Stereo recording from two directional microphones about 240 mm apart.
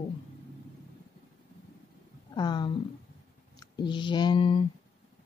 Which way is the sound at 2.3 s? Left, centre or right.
Centre.